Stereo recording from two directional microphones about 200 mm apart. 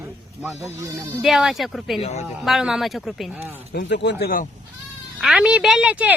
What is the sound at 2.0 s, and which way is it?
Speech, 35° left (ahead or behind).